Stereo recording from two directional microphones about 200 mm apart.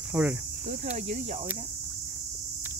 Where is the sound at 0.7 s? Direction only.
40° right (ahead or behind).